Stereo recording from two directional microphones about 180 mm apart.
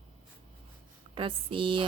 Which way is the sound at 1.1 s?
30° right (ahead or behind).